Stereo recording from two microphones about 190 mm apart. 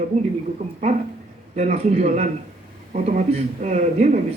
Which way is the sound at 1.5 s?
35° right (ahead or behind).